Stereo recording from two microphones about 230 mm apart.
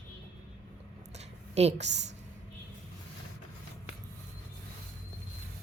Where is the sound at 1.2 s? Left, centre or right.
Right.